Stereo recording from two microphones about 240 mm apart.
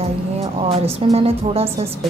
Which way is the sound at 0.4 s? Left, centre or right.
Right.